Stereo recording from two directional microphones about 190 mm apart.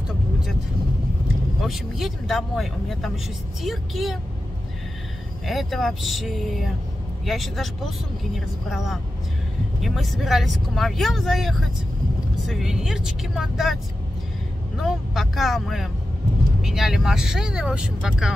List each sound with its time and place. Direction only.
1.6 s speech: centre (ahead or behind)
5.5 s speech: centre (ahead or behind)
14.8 s speech: centre (ahead or behind)